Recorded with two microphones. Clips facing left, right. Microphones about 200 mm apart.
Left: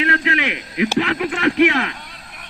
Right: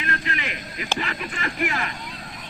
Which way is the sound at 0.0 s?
75° left (ahead or behind).